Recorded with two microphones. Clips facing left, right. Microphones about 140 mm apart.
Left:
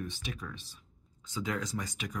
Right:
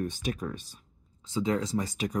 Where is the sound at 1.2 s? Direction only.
30° right (ahead or behind).